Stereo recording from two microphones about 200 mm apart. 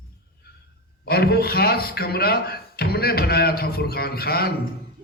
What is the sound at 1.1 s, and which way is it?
A man's voice, 50° left (ahead or behind).